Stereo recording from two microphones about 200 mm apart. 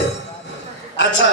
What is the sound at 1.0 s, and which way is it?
Speech, 65° left (ahead or behind).